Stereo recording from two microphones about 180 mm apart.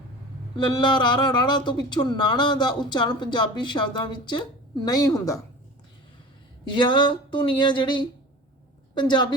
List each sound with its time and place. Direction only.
0.5 s speech: 25° left (ahead or behind)
6.7 s speech: 25° left (ahead or behind)